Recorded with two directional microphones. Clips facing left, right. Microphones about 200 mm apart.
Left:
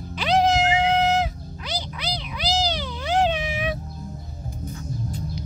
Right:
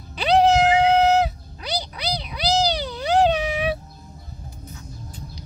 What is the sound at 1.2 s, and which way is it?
Cat, 35° right (ahead or behind).